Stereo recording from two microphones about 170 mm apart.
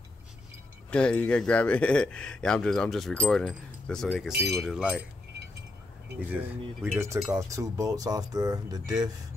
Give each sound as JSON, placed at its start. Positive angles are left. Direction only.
{"t": 0.8, "sound": "speech", "side_deg": 5}
{"t": 6.3, "sound": "speech", "side_deg": -10}